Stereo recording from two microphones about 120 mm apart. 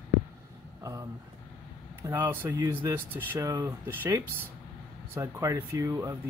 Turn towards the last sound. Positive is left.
turn(degrees=-25)  # may be behind; listen again after turning